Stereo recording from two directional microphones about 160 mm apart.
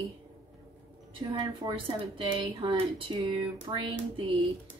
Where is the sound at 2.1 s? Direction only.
30° right (ahead or behind).